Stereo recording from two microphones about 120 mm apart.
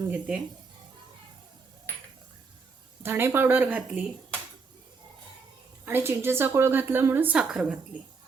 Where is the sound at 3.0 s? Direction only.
20° right (ahead or behind).